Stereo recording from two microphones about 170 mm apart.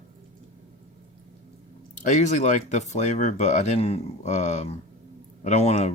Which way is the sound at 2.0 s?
45° left (ahead or behind).